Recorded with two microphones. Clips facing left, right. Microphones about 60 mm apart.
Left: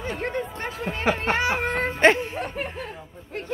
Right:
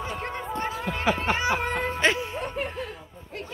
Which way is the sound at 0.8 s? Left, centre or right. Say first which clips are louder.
Left 3 dB; left.